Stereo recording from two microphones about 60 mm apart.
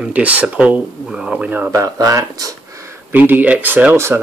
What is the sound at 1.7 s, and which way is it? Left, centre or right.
Speech, right.